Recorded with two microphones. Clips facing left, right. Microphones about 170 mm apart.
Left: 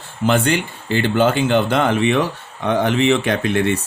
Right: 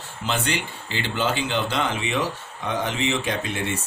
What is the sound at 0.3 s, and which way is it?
Speech, 50° left (ahead or behind).